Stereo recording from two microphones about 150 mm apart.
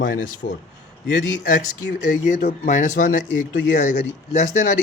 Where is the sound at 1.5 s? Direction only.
60° left (ahead or behind).